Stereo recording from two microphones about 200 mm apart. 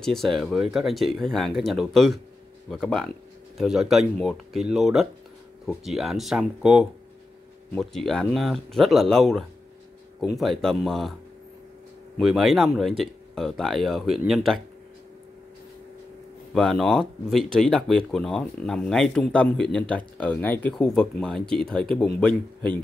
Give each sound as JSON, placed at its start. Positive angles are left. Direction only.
{"t": 0.0, "sound": "speech", "side_deg": 0}
{"t": 12.2, "sound": "speech", "side_deg": 0}
{"t": 16.5, "sound": "speech", "side_deg": 0}